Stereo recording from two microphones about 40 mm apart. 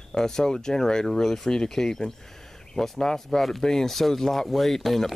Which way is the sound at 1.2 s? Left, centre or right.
Centre.